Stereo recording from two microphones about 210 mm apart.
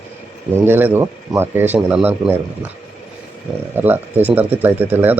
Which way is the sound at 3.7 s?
10° right (ahead or behind).